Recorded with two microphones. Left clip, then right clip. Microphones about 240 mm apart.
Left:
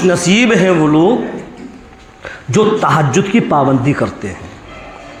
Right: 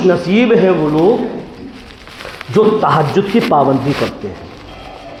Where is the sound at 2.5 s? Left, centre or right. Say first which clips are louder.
Right 1 dB; left.